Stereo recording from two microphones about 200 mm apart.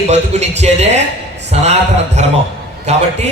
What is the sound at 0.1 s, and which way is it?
A man's voice, 35° right (ahead or behind).